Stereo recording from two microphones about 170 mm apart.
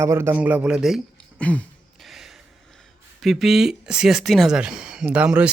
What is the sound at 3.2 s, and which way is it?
Speech, centre (ahead or behind).